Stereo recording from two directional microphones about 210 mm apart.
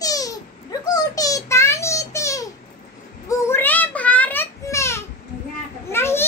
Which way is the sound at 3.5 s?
10° left (ahead or behind).